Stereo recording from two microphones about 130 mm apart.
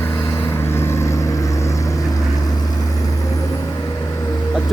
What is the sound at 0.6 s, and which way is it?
Vehicle, 20° left (ahead or behind).